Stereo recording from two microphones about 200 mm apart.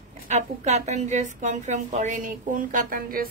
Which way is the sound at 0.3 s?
35° right (ahead or behind).